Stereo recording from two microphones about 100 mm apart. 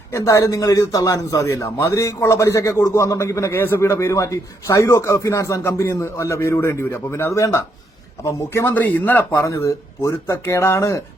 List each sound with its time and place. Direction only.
0.1 s a man's voice: 30° left (ahead or behind)